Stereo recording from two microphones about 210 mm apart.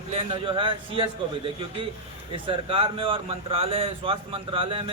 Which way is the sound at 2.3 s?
25° right (ahead or behind).